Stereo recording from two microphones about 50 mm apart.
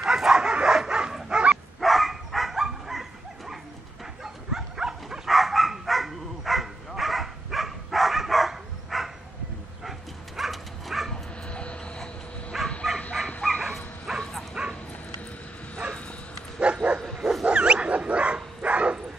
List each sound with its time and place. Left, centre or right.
0.0 s dog: centre
1.8 s dog: centre
9.8 s bow-wow: centre
11.4 s vehicle: left
12.5 s bow-wow: centre
13.4 s dog: centre
16.6 s bow-wow: right
17.2 s dog: centre
17.5 s dog: right